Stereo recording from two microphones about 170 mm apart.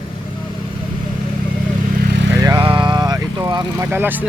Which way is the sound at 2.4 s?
25° right (ahead or behind).